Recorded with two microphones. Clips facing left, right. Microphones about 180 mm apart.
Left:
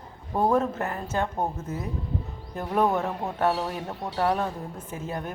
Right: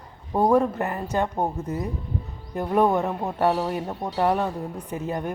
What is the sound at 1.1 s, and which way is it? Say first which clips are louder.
A woman's voice: right 3 dB; 15° right (ahead or behind).